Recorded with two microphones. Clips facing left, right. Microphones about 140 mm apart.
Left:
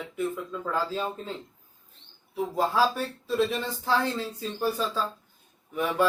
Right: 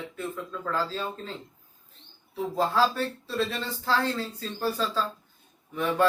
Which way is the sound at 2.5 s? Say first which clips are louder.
Even; 15° left (ahead or behind).